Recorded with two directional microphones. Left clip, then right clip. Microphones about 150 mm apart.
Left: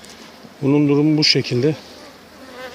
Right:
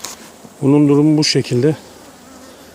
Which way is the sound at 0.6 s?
15° right (ahead or behind).